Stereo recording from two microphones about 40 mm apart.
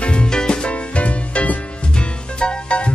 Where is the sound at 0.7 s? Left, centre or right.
Left.